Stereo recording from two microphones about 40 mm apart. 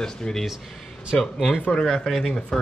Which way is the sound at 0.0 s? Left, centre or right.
Centre.